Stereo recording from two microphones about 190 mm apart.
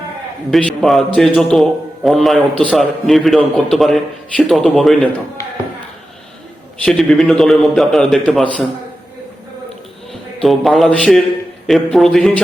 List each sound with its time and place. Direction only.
0.5 s a man's voice: 5° left (ahead or behind)
6.8 s a man's voice: 5° left (ahead or behind)
10.1 s a man's voice: centre (ahead or behind)